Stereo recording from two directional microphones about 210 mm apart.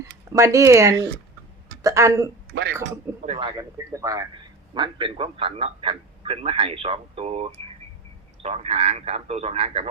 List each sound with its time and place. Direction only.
0.3 s speech: 15° right (ahead or behind)
3.2 s a man's voice: 30° right (ahead or behind)
3.6 s a man's voice: 15° right (ahead or behind)